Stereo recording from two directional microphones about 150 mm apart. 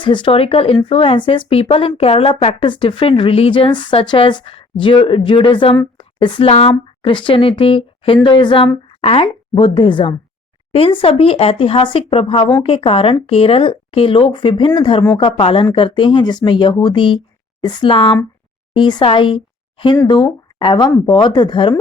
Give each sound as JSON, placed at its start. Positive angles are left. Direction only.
{"t": 0.0, "sound": "speech", "side_deg": 35}